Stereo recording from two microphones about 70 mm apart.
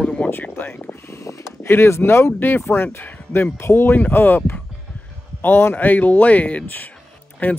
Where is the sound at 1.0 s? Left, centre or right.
Left.